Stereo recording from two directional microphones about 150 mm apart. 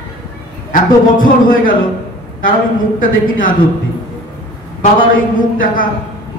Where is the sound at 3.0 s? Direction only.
65° left (ahead or behind).